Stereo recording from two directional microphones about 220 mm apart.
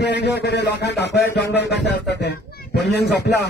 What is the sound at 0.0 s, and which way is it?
A man's voice, 50° left (ahead or behind).